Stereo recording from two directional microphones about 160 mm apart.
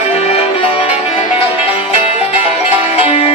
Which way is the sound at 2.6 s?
40° left (ahead or behind).